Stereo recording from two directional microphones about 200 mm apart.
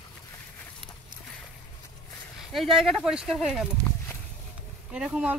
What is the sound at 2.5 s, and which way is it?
Speech, centre (ahead or behind).